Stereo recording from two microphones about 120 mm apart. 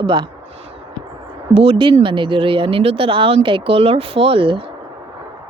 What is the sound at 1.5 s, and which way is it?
Speech, 50° right (ahead or behind).